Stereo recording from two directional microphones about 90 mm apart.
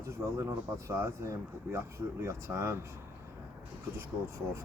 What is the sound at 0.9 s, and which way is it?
Speech, 30° right (ahead or behind).